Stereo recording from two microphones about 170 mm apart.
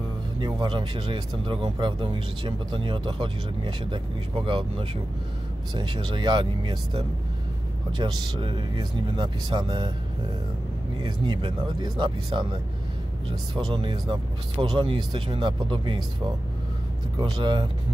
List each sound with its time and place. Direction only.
0.4 s speech: 25° right (ahead or behind)
11.0 s speech: 30° right (ahead or behind)
17.2 s speech: 30° right (ahead or behind)